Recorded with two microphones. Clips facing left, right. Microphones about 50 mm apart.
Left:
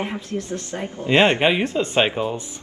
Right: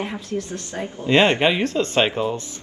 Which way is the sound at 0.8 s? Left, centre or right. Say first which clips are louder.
Even; centre.